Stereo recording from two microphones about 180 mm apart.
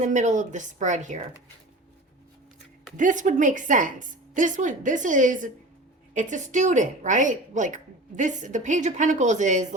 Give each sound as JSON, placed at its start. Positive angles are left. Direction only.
{"t": 0.0, "sound": "a woman's voice", "side_deg": -40}
{"t": 3.0, "sound": "a woman's voice", "side_deg": -45}